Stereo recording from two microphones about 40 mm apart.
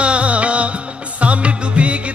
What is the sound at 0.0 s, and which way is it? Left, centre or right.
Music, right.